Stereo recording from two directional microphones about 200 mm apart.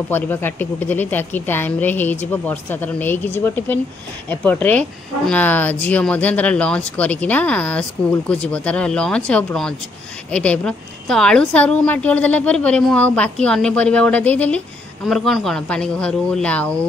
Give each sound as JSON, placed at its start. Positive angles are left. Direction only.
{"t": 0.1, "sound": "a woman's voice", "side_deg": 10}